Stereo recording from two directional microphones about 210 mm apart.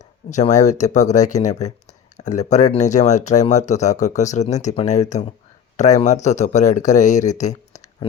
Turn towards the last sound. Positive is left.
turn(degrees=35)  # may be behind; listen again after turning